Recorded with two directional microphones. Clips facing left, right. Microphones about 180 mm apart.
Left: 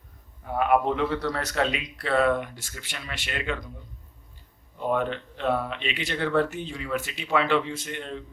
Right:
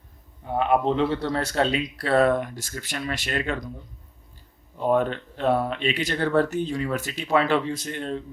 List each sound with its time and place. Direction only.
0.4 s speech: 25° right (ahead or behind)
4.9 s speech: 40° right (ahead or behind)